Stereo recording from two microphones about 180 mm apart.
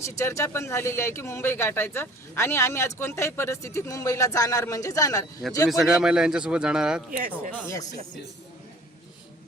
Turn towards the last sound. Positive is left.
turn(degrees=20)  # may be behind; listen again after turning